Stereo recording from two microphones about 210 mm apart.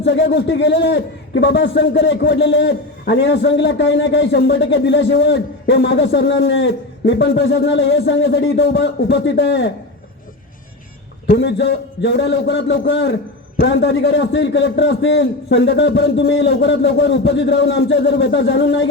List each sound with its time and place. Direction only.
0.0 s a man's voice: 55° left (ahead or behind)
11.3 s a man's voice: 55° left (ahead or behind)